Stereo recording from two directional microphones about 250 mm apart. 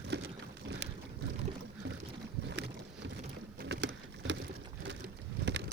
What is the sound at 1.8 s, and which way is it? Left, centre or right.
Boat, right.